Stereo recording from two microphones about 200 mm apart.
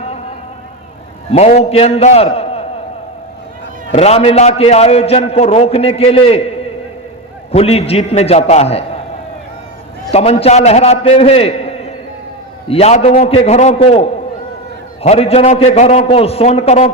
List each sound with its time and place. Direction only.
1.3 s a man's voice: 30° left (ahead or behind)
3.9 s a man's voice: 30° left (ahead or behind)
7.5 s a man's voice: 30° left (ahead or behind)
10.1 s a man's voice: 30° left (ahead or behind)